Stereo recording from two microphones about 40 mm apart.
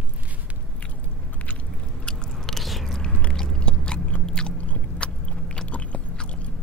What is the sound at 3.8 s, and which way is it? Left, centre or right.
Chewing, left.